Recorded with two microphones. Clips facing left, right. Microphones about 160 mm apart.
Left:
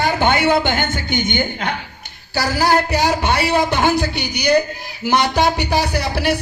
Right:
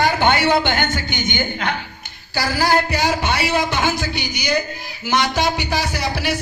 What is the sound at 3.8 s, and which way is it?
Speech, 60° left (ahead or behind).